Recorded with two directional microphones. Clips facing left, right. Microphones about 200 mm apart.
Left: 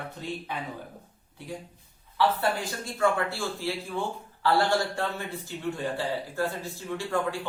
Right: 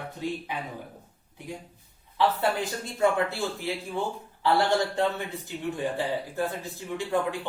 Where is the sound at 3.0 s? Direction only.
20° right (ahead or behind).